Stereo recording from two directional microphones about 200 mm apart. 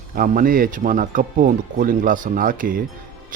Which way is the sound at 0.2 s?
45° right (ahead or behind).